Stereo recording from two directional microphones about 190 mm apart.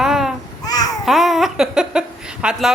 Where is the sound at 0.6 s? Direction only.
20° left (ahead or behind).